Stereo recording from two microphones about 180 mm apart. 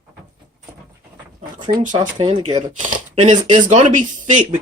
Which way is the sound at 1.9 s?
25° right (ahead or behind).